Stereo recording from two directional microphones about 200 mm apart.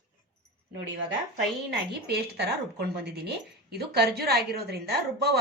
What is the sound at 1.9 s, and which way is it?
Speech, 55° right (ahead or behind).